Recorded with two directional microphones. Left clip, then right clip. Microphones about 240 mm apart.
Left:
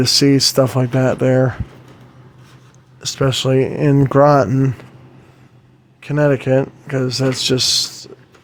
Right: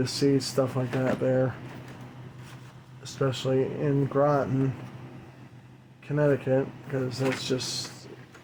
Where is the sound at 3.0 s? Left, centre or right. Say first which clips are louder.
Left 11 dB; left.